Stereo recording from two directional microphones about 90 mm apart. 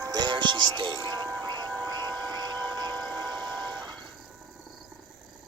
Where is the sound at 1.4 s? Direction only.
45° right (ahead or behind).